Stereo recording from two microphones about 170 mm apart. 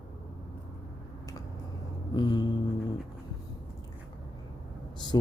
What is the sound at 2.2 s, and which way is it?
Music, 25° left (ahead or behind).